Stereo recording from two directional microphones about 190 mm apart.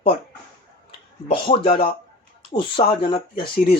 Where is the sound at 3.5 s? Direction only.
55° left (ahead or behind).